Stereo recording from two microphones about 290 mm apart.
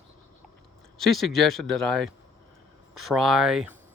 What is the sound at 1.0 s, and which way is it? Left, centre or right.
Speech, centre.